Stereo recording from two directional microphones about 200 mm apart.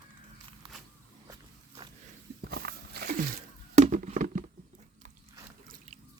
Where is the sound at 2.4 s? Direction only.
50° right (ahead or behind).